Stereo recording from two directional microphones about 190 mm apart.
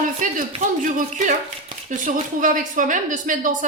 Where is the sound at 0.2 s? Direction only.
45° right (ahead or behind).